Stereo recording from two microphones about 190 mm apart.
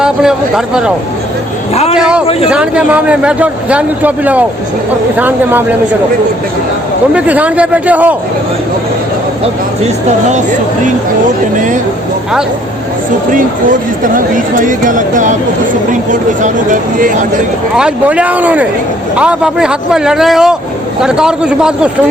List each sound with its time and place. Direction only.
0.0 s a man's voice: 5° right (ahead or behind)
2.0 s a man's voice: 5° right (ahead or behind)
7.1 s a man's voice: 5° right (ahead or behind)
9.8 s speech: 40° right (ahead or behind)
11.5 s speech: 40° right (ahead or behind)
13.3 s speech: 45° right (ahead or behind)
16.4 s speech: 45° right (ahead or behind)
17.7 s a man's voice: 5° right (ahead or behind)